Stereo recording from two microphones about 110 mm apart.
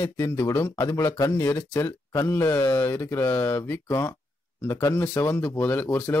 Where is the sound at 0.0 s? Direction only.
25° left (ahead or behind).